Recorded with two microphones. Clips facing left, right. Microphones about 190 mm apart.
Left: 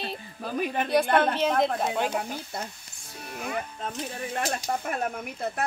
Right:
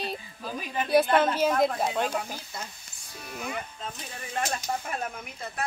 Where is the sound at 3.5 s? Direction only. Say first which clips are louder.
Left 6 dB; 55° left (ahead or behind).